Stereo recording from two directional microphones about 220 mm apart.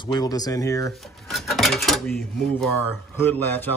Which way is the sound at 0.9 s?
Centre (ahead or behind).